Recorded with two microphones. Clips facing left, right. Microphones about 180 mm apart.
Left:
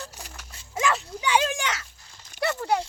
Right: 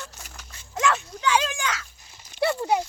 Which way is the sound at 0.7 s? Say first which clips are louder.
Right 1 dB; 10° left (ahead or behind).